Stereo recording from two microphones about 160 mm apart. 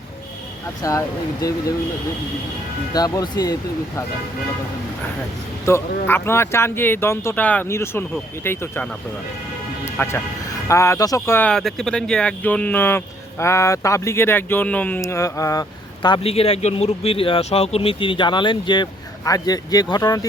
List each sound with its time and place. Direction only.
0.8 s speech: 20° left (ahead or behind)
2.9 s speech: 25° left (ahead or behind)
5.6 s speech: 15° left (ahead or behind)
16.0 s speech: 35° left (ahead or behind)